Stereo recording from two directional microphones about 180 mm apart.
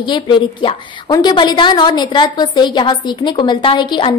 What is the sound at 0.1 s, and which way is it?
A woman's voice, 25° left (ahead or behind).